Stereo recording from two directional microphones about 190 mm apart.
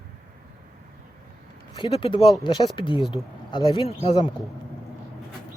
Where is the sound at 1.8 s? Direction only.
25° left (ahead or behind).